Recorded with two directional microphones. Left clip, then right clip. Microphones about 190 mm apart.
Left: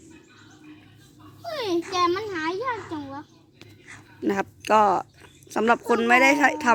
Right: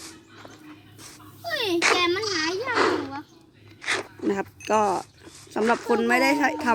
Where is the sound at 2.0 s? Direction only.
10° right (ahead or behind).